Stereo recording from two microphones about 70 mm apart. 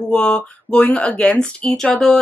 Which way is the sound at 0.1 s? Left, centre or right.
Centre.